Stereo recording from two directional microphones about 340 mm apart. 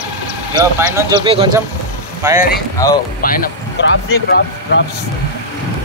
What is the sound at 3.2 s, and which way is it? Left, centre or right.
Speech, left.